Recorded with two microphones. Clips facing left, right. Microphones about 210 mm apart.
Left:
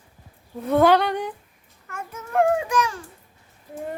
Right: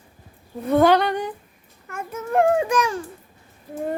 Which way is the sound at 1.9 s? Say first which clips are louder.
Right 4 dB; 20° right (ahead or behind).